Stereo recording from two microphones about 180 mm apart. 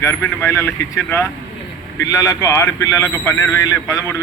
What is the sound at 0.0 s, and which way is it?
A man's voice, 15° left (ahead or behind).